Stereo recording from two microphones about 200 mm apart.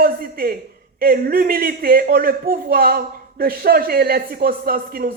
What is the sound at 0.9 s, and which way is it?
A man's voice, 45° right (ahead or behind).